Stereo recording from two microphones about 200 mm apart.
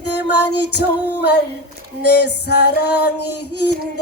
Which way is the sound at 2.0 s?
55° left (ahead or behind).